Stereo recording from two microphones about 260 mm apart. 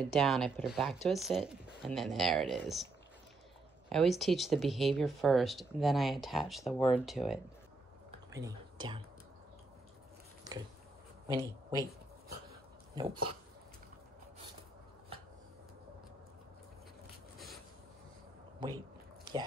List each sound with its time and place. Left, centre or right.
0.1 s speech: centre
3.9 s speech: centre
8.4 s speech: centre
11.2 s speech: centre
12.9 s speech: centre